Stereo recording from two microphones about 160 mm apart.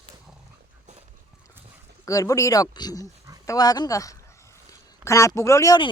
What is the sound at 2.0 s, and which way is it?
Speech, 20° left (ahead or behind).